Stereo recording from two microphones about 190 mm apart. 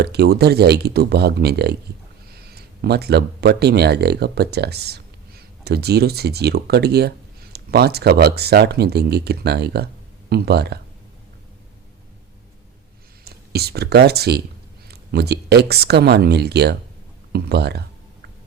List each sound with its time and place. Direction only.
0.0 s speech: 60° right (ahead or behind)
13.2 s speech: 55° right (ahead or behind)